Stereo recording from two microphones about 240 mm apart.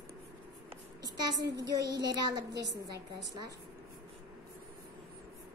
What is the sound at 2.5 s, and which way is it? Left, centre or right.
Speech, right.